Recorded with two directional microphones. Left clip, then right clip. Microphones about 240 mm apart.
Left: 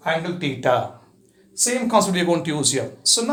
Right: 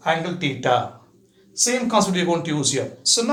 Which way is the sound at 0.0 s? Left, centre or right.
Centre.